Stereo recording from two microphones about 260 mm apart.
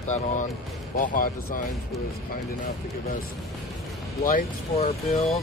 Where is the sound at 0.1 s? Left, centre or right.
Left.